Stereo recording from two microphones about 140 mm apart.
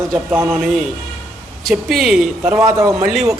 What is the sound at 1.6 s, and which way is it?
Speech, centre (ahead or behind).